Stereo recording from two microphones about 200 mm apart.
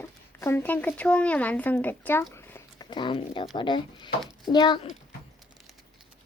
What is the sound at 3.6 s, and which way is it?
Speech, 20° left (ahead or behind).